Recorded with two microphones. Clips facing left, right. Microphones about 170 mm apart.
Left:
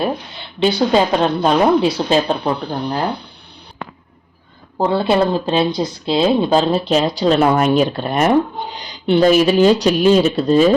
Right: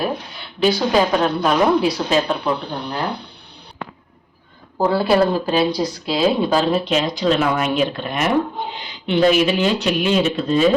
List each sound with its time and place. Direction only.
0.0 s a woman's voice: 25° left (ahead or behind)
4.8 s speech: 25° left (ahead or behind)